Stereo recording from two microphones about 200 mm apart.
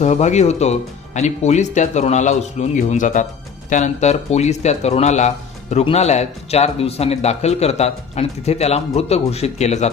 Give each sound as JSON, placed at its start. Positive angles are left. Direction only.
{"t": 0.0, "sound": "speech", "side_deg": 35}